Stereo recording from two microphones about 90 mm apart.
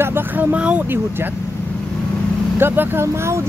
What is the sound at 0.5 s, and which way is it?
Speech, 15° right (ahead or behind).